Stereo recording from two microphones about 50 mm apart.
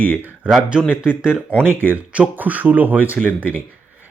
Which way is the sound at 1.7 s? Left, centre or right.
Right.